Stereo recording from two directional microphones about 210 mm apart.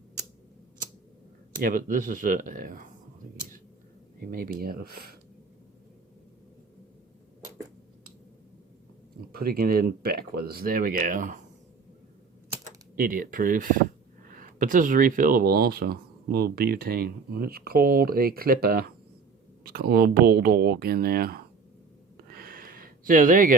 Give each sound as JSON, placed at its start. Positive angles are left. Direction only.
{"t": 1.6, "sound": "speech", "side_deg": -40}
{"t": 4.2, "sound": "speech", "side_deg": -45}
{"t": 9.3, "sound": "speech", "side_deg": -45}
{"t": 13.0, "sound": "speech", "side_deg": -40}
{"t": 22.4, "sound": "a sound", "side_deg": -45}